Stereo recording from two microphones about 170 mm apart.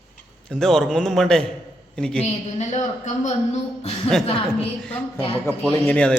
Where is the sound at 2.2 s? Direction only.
45° left (ahead or behind).